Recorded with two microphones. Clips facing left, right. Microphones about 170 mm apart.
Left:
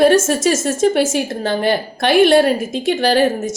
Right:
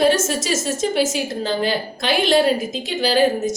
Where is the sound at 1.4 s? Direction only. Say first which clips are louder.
Left 4 dB; 60° left (ahead or behind).